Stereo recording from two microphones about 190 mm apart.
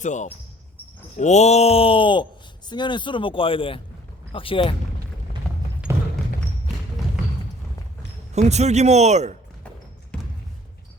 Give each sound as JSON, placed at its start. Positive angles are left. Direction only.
{"t": 0.0, "sound": "a sound", "side_deg": 40}
{"t": 2.6, "sound": "speech", "side_deg": 25}
{"t": 8.3, "sound": "speech", "side_deg": -35}
{"t": 10.1, "sound": "basketball bounce", "side_deg": 5}